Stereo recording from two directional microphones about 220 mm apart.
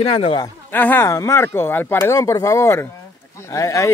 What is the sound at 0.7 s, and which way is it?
Speech, 10° left (ahead or behind).